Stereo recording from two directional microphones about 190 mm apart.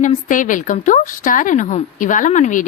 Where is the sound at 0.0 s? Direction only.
45° left (ahead or behind).